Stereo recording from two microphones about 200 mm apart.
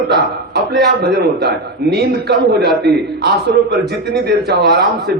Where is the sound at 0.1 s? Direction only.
55° right (ahead or behind).